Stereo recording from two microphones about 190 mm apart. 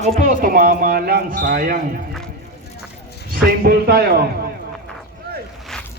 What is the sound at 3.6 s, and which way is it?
Speech, 55° right (ahead or behind).